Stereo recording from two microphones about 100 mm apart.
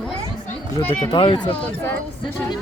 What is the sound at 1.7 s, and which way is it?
Speech, 15° left (ahead or behind).